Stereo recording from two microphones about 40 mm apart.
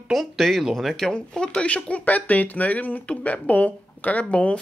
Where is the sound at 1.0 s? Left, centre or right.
Centre.